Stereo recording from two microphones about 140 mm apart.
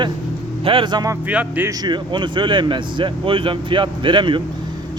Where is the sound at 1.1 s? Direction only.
10° right (ahead or behind).